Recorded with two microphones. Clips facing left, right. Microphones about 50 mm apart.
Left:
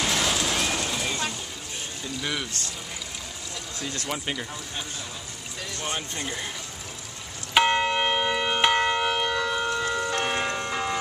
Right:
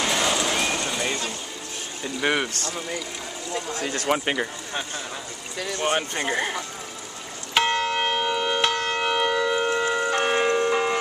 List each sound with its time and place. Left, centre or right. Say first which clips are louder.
0.0 s vehicle: right 2 dB; centre
2.2 s speech: right 9 dB; right
3.5 s speech: right 7 dB; right
5.8 s speech: right 8 dB; right
7.5 s church bell: left 1 dB; centre
8.0 s a sound: right 1 dB; centre
9.0 s siren: right 3 dB; centre
9.7 s church bell: right 4 dB; right